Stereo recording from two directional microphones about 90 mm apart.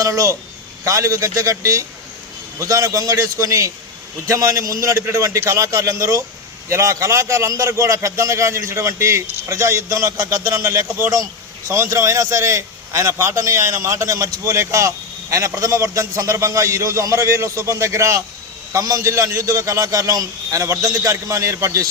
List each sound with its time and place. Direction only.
0.0 s a man's voice: 35° right (ahead or behind)